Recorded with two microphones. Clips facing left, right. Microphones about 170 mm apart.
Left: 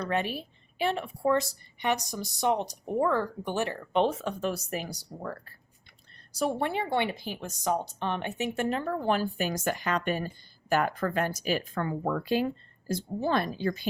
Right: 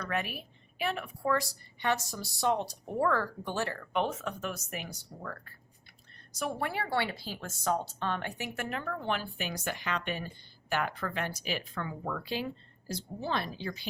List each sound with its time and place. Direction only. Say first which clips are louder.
0.0 s a woman's voice: left 5 dB; 30° left (ahead or behind); by 13.8 s 50° left (ahead or behind)